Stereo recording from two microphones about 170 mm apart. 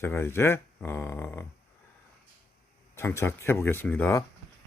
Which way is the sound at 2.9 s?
15° left (ahead or behind).